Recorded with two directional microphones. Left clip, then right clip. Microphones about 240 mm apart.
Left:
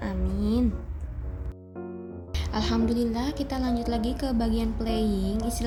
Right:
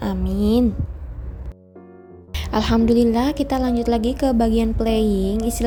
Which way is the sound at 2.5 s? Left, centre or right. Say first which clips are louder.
Right 10 dB; right.